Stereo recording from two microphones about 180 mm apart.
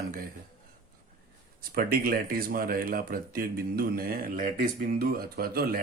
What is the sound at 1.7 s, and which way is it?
Speech, 55° right (ahead or behind).